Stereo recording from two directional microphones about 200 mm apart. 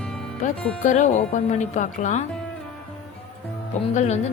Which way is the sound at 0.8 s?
40° left (ahead or behind).